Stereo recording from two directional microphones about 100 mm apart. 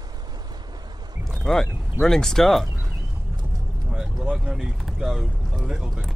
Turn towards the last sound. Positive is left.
turn(degrees=0)  # may be behind; listen again after turning